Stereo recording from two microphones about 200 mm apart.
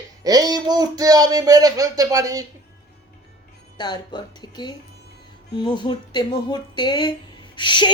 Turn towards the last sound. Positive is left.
turn(degrees=25)  # may be behind; listen again after turning